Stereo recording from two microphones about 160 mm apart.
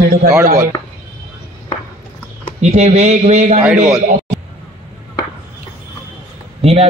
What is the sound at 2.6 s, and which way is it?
A man's voice, 45° right (ahead or behind).